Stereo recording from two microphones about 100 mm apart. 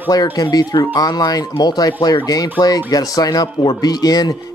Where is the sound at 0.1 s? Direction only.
40° left (ahead or behind).